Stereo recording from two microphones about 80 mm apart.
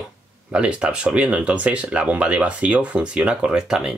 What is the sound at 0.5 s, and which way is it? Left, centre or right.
Speech, centre.